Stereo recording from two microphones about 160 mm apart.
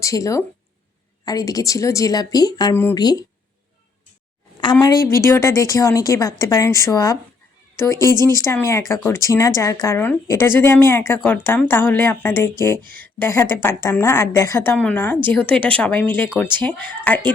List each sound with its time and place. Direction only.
0.0 s a woman's voice: 20° left (ahead or behind)
2.7 s a woman's voice: 15° left (ahead or behind)
3.0 s a woman's voice: 25° left (ahead or behind)
4.6 s a woman's voice: 25° left (ahead or behind); by 17.3 s 10° left (ahead or behind)